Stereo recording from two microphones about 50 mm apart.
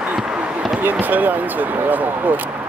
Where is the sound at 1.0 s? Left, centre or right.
Right.